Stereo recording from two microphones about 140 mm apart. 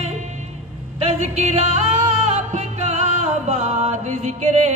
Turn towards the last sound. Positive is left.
turn(degrees=-55)  # may be behind; listen again after turning